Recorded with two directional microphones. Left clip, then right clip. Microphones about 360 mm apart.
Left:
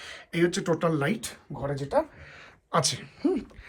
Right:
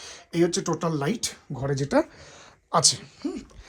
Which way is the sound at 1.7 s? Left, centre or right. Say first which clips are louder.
Right 3 dB; right.